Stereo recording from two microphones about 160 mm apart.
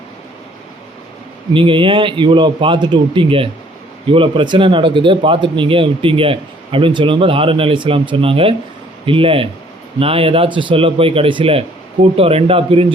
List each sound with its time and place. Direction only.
1.5 s speech: 30° right (ahead or behind)